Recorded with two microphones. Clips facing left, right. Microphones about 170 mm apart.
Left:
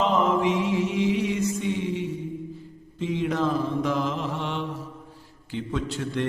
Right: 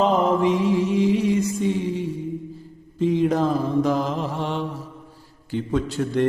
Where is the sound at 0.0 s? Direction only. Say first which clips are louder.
Right 3 dB; 40° right (ahead or behind).